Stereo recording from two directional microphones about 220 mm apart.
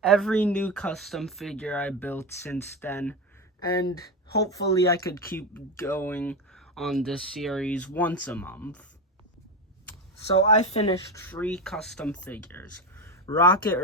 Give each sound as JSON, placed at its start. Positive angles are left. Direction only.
{"t": 0.0, "sound": "speech", "side_deg": 0}
{"t": 10.4, "sound": "speech", "side_deg": 30}
{"t": 11.1, "sound": "speech", "side_deg": 10}